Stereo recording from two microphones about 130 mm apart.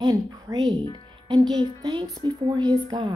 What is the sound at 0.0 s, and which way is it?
A woman's voice, 30° right (ahead or behind).